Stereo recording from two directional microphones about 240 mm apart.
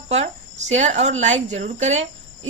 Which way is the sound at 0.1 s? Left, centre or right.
Right.